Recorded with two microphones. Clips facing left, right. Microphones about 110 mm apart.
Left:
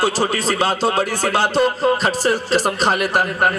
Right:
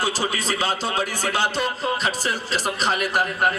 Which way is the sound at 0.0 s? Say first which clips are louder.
Left 6 dB; 35° left (ahead or behind).